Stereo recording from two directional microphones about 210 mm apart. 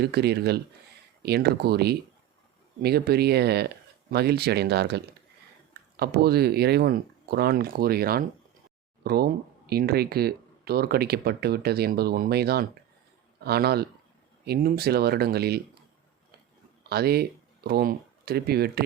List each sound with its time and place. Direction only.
0.0 s speech: 50° right (ahead or behind)
16.9 s speech: 50° right (ahead or behind)